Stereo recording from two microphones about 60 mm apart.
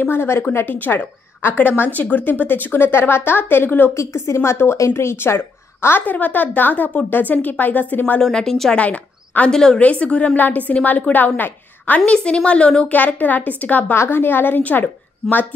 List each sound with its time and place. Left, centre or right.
0.0 s a woman's voice: left
3.9 s a woman's voice: left
6.0 s a woman's voice: left
8.2 s a woman's voice: centre
8.7 s speech: left
9.5 s a woman's voice: centre
9.8 s a woman's voice: left
12.4 s a woman's voice: centre
13.9 s a woman's voice: left